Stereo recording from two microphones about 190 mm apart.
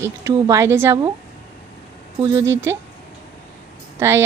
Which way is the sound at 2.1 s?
15° right (ahead or behind).